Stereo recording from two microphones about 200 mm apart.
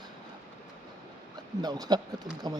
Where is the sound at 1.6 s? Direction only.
20° right (ahead or behind).